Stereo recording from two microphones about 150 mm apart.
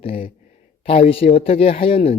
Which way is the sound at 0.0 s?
40° left (ahead or behind).